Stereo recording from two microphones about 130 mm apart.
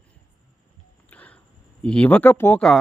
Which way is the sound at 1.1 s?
10° left (ahead or behind).